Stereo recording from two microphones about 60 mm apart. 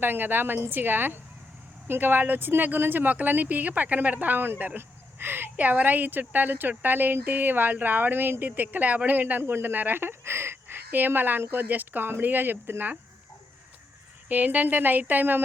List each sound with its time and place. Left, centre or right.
0.0 s a woman's voice: right
14.3 s speech: right